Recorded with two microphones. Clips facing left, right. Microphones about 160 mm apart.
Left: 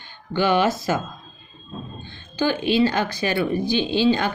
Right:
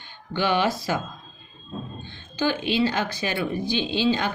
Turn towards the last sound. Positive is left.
turn(degrees=45)  # may be behind; listen again after turning